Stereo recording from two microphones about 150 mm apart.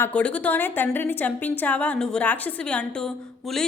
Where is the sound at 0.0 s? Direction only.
10° left (ahead or behind).